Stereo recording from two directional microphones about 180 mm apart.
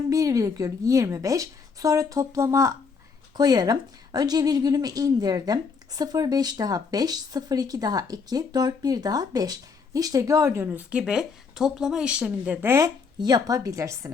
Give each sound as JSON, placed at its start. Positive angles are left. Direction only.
{"t": 0.1, "sound": "a woman's voice", "side_deg": -20}